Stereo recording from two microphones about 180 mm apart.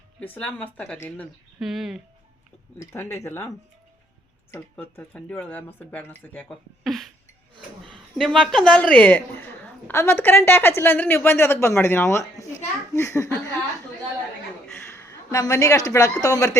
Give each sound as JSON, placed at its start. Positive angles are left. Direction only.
{"t": 0.2, "sound": "a woman's voice", "side_deg": 10}
{"t": 1.5, "sound": "speech", "side_deg": 0}
{"t": 2.7, "sound": "a woman's voice", "side_deg": 15}
{"t": 4.5, "sound": "a woman's voice", "side_deg": 10}
{"t": 14.8, "sound": "speech", "side_deg": 15}